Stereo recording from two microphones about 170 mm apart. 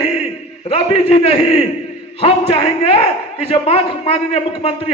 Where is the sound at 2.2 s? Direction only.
35° left (ahead or behind).